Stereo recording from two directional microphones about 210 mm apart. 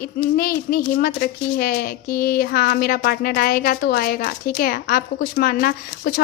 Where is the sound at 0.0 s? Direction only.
45° left (ahead or behind).